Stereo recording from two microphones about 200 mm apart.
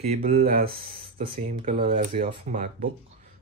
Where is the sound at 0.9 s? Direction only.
25° right (ahead or behind).